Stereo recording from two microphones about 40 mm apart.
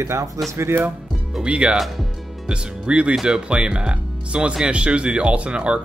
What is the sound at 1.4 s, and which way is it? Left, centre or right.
Speech, right.